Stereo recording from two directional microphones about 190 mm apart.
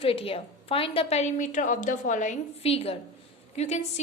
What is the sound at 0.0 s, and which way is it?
A woman's voice, 30° left (ahead or behind).